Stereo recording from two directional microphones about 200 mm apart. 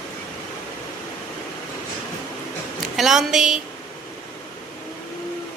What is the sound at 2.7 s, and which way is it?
Speech, centre (ahead or behind).